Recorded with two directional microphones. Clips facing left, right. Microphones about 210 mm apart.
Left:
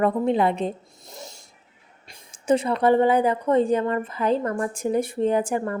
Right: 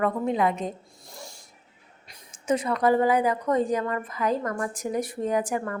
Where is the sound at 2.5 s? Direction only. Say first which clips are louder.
Left 3 dB; 30° left (ahead or behind).